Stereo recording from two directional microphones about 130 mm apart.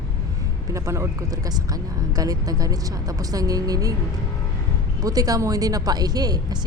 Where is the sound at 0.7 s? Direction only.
25° right (ahead or behind).